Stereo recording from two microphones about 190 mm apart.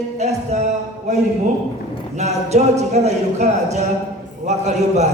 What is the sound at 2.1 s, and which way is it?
A man's voice, 35° right (ahead or behind).